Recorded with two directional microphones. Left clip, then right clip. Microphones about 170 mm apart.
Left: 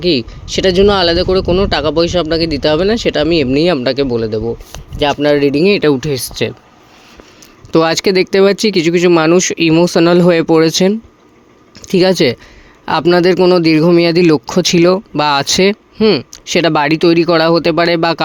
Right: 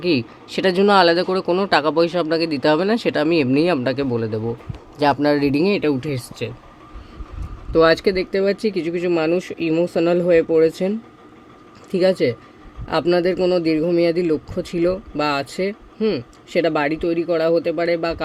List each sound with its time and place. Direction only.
0.0 s speech: 30° left (ahead or behind)
4.9 s speech: 20° left (ahead or behind)
5.6 s a man's voice: 50° left (ahead or behind)
7.7 s a man's voice: 45° left (ahead or behind)